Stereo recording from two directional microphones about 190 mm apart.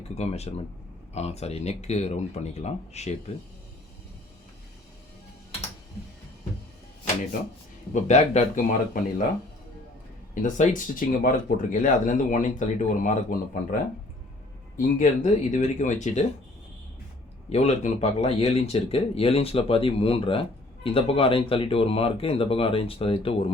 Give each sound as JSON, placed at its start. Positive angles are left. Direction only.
{"t": 0.1, "sound": "speech", "side_deg": 35}
{"t": 7.9, "sound": "speech", "side_deg": 35}
{"t": 10.4, "sound": "speech", "side_deg": 45}
{"t": 14.8, "sound": "speech", "side_deg": 40}
{"t": 17.5, "sound": "speech", "side_deg": 35}